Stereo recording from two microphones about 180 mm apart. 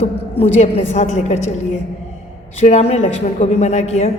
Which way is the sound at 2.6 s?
35° left (ahead or behind).